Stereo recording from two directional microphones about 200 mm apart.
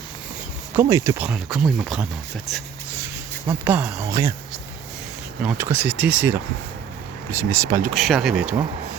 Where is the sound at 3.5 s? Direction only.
10° right (ahead or behind).